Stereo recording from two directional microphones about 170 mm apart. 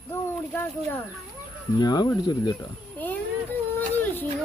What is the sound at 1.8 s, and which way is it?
Speech, 25° left (ahead or behind).